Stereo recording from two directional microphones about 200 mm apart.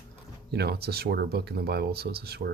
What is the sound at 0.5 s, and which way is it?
Speech, 55° right (ahead or behind).